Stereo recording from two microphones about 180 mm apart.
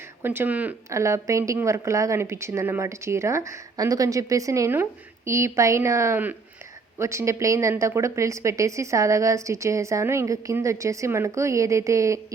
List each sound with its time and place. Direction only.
0.2 s speech: 10° right (ahead or behind)